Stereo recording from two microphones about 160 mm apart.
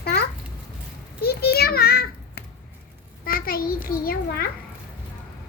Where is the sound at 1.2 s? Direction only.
80° left.